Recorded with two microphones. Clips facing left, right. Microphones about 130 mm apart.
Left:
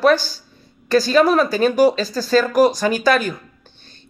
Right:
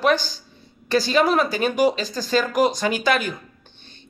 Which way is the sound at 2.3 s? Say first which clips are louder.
Left 5 dB; 45° left (ahead or behind).